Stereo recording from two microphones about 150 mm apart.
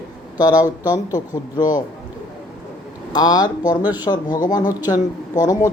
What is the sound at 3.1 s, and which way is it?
Speech, 25° left (ahead or behind).